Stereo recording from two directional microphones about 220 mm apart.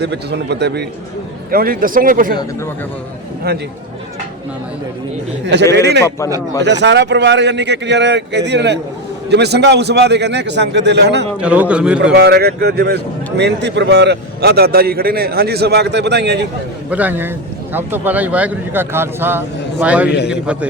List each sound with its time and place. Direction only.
0.0 s speech: 50° right (ahead or behind)
5.7 s speech: 50° right (ahead or behind)
6.1 s a man's voice: 15° left (ahead or behind)
6.6 s speech: 50° right (ahead or behind)
11.3 s a man's voice: 5° right (ahead or behind)
12.1 s speech: 50° right (ahead or behind)
16.9 s speech: 5° right (ahead or behind)
20.1 s a man's voice: 50° left (ahead or behind)
20.3 s a man's voice: 5° right (ahead or behind)